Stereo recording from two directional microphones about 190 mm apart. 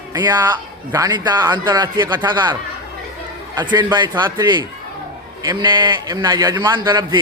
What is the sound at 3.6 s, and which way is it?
A man's voice, 25° right (ahead or behind).